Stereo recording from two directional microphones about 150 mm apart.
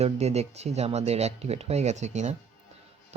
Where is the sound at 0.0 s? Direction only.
45° right (ahead or behind).